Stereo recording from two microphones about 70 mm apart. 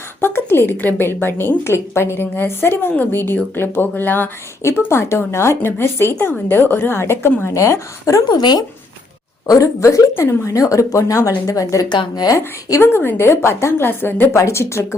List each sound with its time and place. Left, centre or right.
0.2 s a woman's voice: left
4.9 s a woman's voice: left
7.5 s speech: left
8.3 s speech: left
9.5 s speech: left
11.9 s speech: left
12.8 s a woman's voice: left
14.3 s speech: left